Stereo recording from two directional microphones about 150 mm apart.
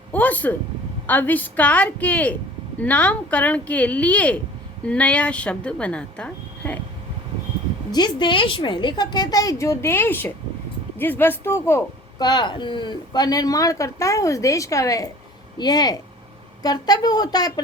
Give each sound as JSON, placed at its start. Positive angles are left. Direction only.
{"t": 0.1, "sound": "a sound", "side_deg": 10}
{"t": 1.0, "sound": "speech", "side_deg": 10}
{"t": 7.9, "sound": "speech", "side_deg": 30}
{"t": 12.2, "sound": "speech", "side_deg": 30}